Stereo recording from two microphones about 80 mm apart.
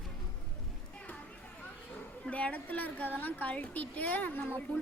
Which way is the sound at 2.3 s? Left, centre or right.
Centre.